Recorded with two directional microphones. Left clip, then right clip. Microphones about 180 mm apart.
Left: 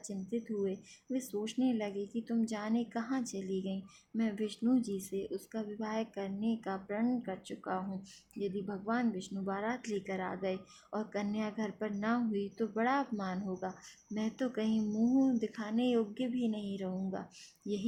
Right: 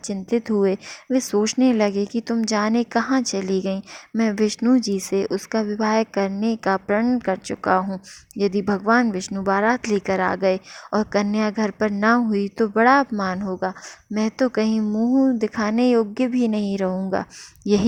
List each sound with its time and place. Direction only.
0.1 s speech: 50° right (ahead or behind)
8.6 s a woman's voice: 65° right (ahead or behind)
9.0 s speech: 50° right (ahead or behind)